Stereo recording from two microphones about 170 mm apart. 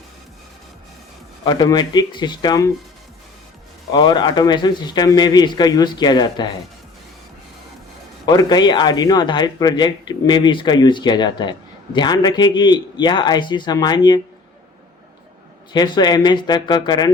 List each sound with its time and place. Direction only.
1.5 s speech: 25° left (ahead or behind)
3.9 s speech: 25° left (ahead or behind)
8.3 s speech: 25° left (ahead or behind)
15.7 s speech: 25° left (ahead or behind)